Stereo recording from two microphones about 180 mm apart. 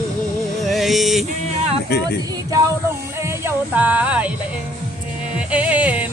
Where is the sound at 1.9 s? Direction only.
65° left (ahead or behind).